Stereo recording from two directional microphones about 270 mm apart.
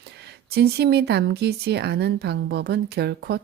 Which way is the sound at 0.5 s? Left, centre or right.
Right.